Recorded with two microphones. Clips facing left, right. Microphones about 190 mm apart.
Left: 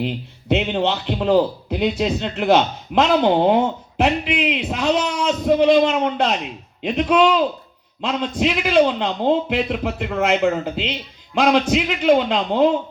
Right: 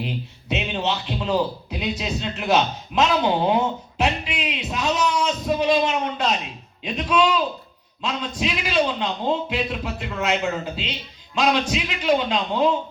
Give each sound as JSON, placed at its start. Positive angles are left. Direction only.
{"t": 0.0, "sound": "a man's voice", "side_deg": 60}